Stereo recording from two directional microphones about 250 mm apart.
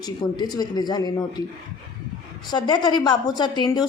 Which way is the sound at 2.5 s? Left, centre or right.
Centre.